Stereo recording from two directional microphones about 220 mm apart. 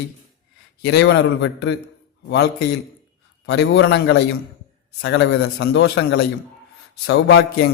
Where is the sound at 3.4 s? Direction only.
55° left (ahead or behind).